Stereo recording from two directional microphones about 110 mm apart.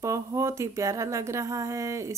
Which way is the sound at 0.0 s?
30° right (ahead or behind).